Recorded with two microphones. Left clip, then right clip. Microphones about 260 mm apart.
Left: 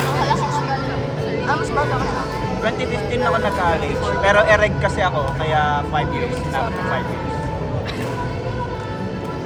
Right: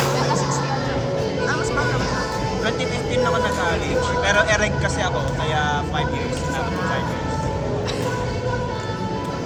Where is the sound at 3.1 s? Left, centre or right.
Left.